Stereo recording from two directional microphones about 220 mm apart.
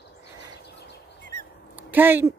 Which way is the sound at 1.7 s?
10° right (ahead or behind).